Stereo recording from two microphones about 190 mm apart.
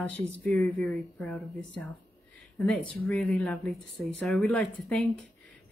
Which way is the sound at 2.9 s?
5° left (ahead or behind).